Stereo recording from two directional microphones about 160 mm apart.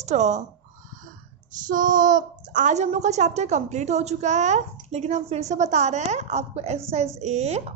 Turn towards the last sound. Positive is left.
turn(degrees=-45)  # may be behind; listen again after turning